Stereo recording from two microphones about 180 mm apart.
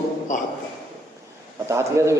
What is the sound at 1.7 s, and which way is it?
Speech, 15° right (ahead or behind).